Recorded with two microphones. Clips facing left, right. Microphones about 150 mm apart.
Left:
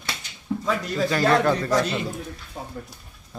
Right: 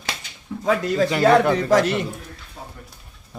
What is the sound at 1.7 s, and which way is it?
Speech, 85° right.